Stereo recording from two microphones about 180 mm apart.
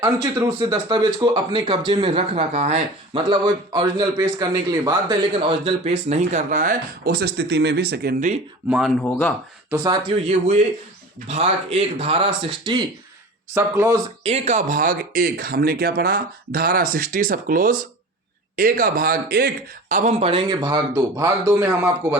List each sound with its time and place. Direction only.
0.0 s a man's voice: 20° right (ahead or behind); by 2.8 s 35° right (ahead or behind)
3.2 s a man's voice: 25° right (ahead or behind)
6.1 s speech: 40° right (ahead or behind); by 8.3 s 60° right (ahead or behind)
9.0 s speech: 5° left (ahead or behind)
10.2 s speech: 40° right (ahead or behind)
13.5 s speech: 15° right (ahead or behind)
14.3 s speech: 40° right (ahead or behind)
20.5 s speech: 20° right (ahead or behind)